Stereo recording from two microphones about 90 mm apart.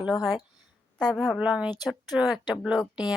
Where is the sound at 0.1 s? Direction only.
50° left (ahead or behind).